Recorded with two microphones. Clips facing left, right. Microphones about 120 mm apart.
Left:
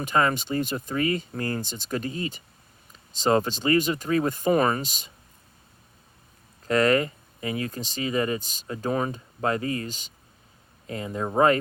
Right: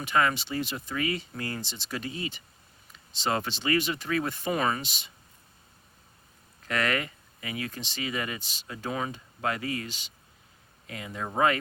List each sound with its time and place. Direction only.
0.0 s speech: 40° left (ahead or behind)
6.7 s speech: 35° left (ahead or behind)